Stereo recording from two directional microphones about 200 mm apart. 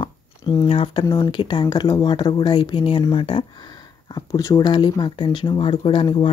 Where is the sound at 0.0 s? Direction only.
20° left (ahead or behind).